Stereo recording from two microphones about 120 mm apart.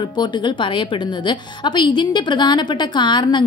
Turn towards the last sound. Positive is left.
turn(degrees=40)  # may be behind; listen again after turning